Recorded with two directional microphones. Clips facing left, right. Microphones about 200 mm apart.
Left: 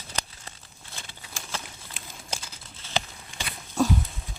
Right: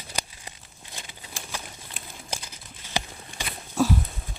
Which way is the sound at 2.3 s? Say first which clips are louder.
Right 1 dB; 15° right (ahead or behind).